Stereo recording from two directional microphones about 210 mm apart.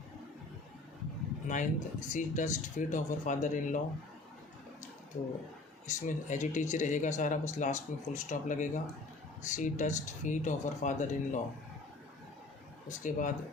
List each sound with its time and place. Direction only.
1.5 s speech: 35° left (ahead or behind)
5.9 s speech: 35° left (ahead or behind)
12.9 s speech: 35° left (ahead or behind)